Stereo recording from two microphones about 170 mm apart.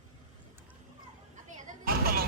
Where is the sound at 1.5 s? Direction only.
45° right (ahead or behind).